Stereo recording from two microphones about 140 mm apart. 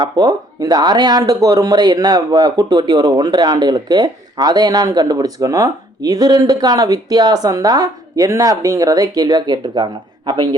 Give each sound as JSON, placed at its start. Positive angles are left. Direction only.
{"t": 0.0, "sound": "speech", "side_deg": -25}